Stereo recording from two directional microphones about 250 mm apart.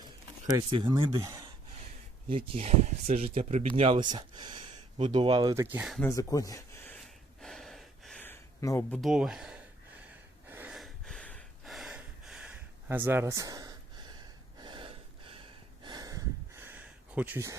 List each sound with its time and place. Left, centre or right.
0.8 s speech: centre
2.3 s speech: right; by 6.1 s centre
6.1 s speech: centre
7.4 s gasp: centre
9.0 s speech: centre
10.5 s a sound: centre
14.6 s gasp: centre
15.8 s a sound: centre